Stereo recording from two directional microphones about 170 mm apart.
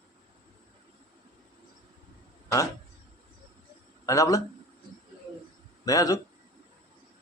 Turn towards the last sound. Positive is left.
turn(degrees=20)  # may be behind; listen again after turning